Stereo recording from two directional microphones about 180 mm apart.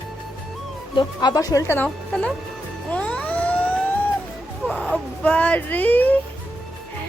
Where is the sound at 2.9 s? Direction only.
5° left (ahead or behind).